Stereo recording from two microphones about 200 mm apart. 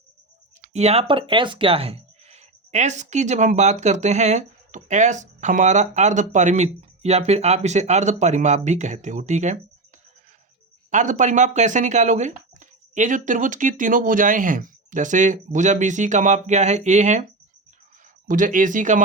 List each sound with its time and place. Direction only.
0.6 s speech: 35° right (ahead or behind)
10.9 s speech: 40° right (ahead or behind)
18.3 s speech: 40° right (ahead or behind)